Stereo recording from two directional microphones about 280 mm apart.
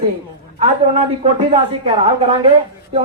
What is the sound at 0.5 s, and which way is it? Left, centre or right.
A woman's voice, right.